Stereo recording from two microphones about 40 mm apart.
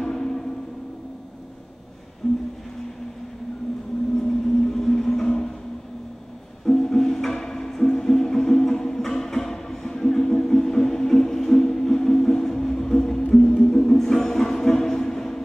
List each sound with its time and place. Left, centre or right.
0.0 s music: centre
2.2 s a sound: centre
4.3 s vehicle: centre
6.6 s music: centre